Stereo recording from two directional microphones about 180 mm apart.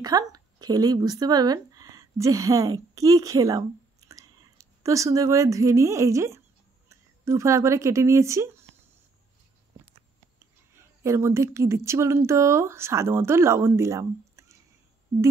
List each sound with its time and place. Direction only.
0.0 s speech: 20° right (ahead or behind)
10.7 s a woman's voice: 15° right (ahead or behind)